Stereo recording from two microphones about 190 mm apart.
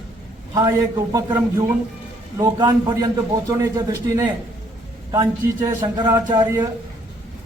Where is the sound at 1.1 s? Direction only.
15° right (ahead or behind).